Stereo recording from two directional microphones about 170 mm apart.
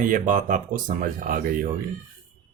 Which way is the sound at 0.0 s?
50° right (ahead or behind).